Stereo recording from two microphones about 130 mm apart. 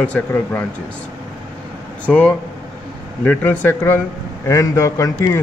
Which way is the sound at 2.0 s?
10° left (ahead or behind).